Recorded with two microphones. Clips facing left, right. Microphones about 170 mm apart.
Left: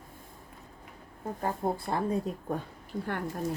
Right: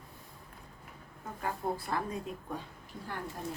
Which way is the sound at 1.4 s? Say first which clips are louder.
Left 4 dB; 35° left (ahead or behind).